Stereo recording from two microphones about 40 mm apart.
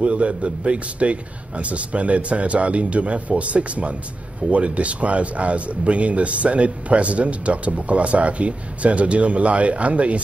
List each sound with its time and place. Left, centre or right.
0.0 s speech: right